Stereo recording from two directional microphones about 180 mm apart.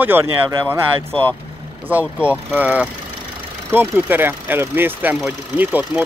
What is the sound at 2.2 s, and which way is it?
Speech, 5° right (ahead or behind).